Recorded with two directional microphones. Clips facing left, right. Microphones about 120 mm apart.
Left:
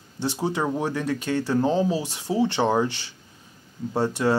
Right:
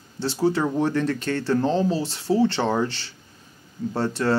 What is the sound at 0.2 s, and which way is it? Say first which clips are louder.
Speech: right 3 dB; 15° left (ahead or behind).